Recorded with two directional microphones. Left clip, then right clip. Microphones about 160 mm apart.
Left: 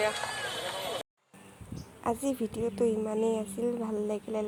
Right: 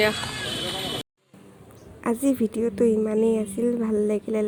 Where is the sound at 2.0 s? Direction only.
15° right (ahead or behind).